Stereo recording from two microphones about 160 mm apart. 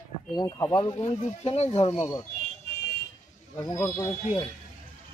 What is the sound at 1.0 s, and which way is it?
Speech, 40° left (ahead or behind).